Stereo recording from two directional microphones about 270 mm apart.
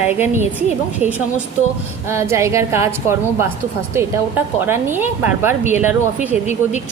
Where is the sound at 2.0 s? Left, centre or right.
Centre.